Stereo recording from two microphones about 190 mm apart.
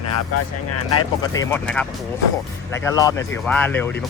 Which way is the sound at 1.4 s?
5° left (ahead or behind).